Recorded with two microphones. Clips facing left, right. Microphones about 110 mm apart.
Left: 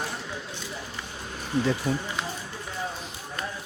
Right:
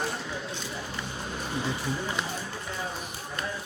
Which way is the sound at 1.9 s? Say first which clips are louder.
Left 4 dB; 55° left (ahead or behind).